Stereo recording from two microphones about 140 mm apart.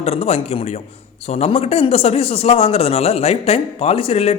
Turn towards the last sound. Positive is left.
turn(degrees=45)  # may be behind; listen again after turning